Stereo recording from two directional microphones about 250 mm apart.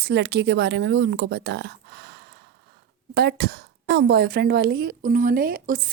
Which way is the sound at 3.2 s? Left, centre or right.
Right.